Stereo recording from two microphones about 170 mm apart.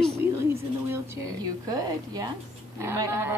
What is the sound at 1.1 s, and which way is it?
Speech, 20° right (ahead or behind).